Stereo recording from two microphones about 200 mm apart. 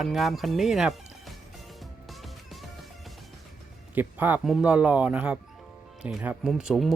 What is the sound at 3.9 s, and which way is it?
Speech, 10° right (ahead or behind).